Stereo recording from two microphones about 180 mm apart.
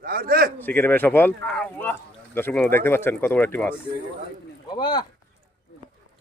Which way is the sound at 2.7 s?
15° left (ahead or behind).